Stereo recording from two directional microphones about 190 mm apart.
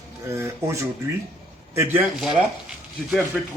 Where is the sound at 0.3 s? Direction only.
15° right (ahead or behind).